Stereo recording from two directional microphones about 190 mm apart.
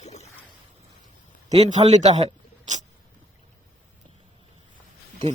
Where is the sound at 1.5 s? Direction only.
35° right (ahead or behind).